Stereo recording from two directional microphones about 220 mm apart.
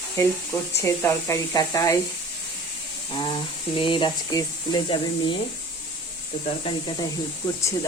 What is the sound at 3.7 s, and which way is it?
Speech, 20° left (ahead or behind).